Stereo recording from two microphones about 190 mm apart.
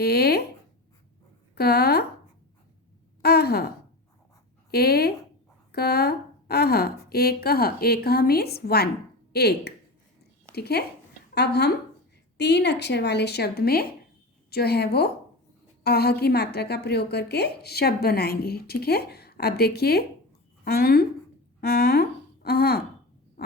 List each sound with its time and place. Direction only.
0.0 s speech: 55° left (ahead or behind)
1.5 s a woman's voice: 55° left (ahead or behind)
3.2 s sigh: 55° left (ahead or behind)
4.7 s a woman's voice: 55° left (ahead or behind)